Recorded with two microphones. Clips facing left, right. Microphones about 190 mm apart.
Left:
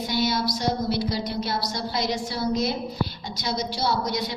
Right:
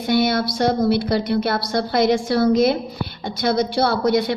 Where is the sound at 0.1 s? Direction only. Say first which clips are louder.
Right 8 dB; 60° right (ahead or behind).